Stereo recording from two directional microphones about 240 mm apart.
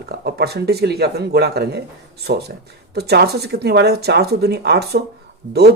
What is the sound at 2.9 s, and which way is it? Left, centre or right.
Speech, right.